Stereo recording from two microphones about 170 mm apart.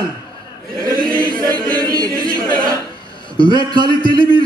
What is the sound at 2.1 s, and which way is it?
Speech, 55° right (ahead or behind).